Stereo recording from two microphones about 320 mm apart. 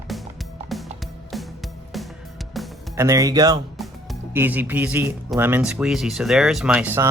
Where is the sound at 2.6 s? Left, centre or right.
Centre.